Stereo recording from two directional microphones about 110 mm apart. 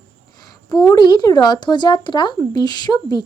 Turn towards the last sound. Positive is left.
turn(degrees=40)  # may be behind; listen again after turning